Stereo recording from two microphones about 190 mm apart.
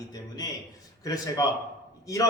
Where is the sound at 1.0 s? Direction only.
20° left (ahead or behind).